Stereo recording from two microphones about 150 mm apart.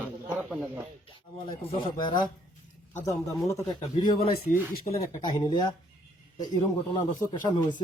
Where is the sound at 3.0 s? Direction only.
20° left (ahead or behind).